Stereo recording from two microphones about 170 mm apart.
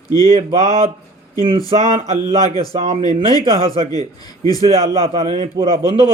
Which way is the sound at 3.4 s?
35° right (ahead or behind).